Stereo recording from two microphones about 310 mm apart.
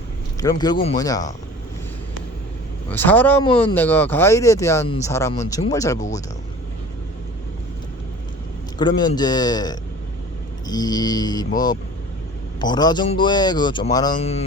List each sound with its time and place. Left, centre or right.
0.3 s speech: centre
2.9 s speech: centre
6.0 s a man's voice: left
8.8 s speech: centre